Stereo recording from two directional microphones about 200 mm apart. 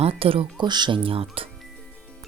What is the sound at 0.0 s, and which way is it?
Speech, 30° right (ahead or behind).